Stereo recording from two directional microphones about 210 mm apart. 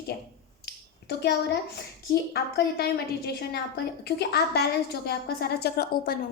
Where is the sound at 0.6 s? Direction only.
50° left (ahead or behind).